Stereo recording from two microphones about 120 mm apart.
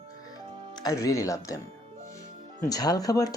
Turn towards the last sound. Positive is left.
turn(degrees=30)  # may be behind; listen again after turning